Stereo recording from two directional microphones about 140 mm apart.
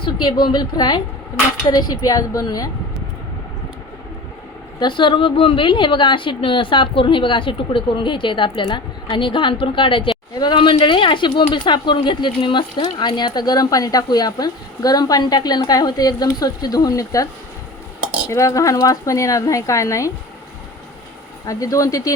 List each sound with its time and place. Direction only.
0.0 s a sound: 35° left (ahead or behind)
0.4 s a woman's voice: 30° left (ahead or behind)
4.8 s a woman's voice: 35° left (ahead or behind)
18.3 s speech: 20° left (ahead or behind)
21.4 s speech: 25° left (ahead or behind)